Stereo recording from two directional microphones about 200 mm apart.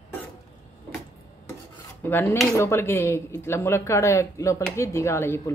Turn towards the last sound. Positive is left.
turn(degrees=15)  # may be behind; listen again after turning